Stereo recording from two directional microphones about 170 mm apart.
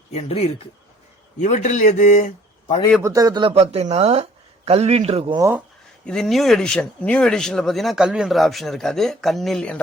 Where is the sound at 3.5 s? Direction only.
35° right (ahead or behind).